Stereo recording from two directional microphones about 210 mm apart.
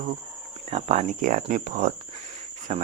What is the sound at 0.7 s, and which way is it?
Speech, 30° right (ahead or behind).